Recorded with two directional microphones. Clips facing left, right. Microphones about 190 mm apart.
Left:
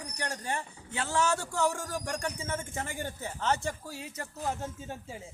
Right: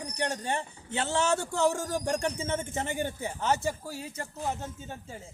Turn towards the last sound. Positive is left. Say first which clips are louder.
# left 1 dB
turn(degrees=5)  # may be behind; listen again after turning